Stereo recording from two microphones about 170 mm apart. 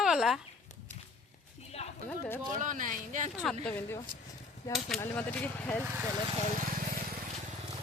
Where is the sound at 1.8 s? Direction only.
40° left (ahead or behind).